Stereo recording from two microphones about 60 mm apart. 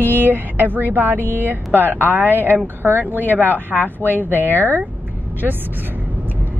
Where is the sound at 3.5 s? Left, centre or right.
Left.